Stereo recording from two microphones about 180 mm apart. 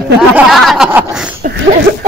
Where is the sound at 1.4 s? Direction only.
75° right (ahead or behind).